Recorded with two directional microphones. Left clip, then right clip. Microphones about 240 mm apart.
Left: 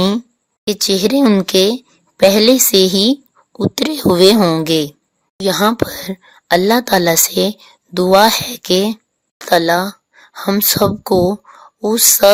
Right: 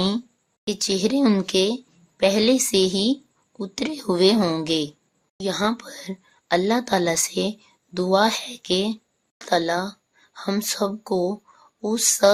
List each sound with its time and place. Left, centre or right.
0.0 s a woman's voice: left